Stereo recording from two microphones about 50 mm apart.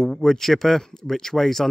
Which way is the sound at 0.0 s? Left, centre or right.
Centre.